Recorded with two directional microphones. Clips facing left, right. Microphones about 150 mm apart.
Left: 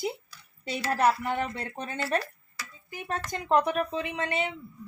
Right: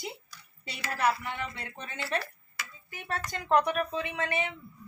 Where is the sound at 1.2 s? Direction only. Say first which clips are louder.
Left 7 dB; 40° left (ahead or behind).